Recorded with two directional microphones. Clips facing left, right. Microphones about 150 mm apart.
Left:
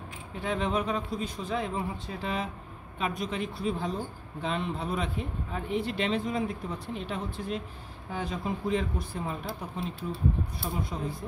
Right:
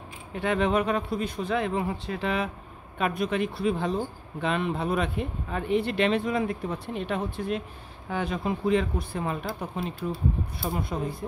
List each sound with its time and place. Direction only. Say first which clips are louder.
0.3 s a man's voice: right 5 dB; 70° right (ahead or behind)
10.6 s a man's voice: right 3 dB; 60° right (ahead or behind)